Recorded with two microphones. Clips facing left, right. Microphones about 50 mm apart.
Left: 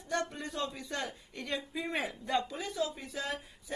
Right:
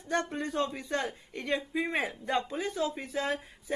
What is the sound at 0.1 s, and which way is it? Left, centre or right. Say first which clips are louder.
Speech: right 4 dB; right.